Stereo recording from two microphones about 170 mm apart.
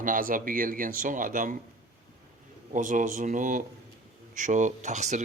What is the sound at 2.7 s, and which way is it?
Speech, 50° right (ahead or behind).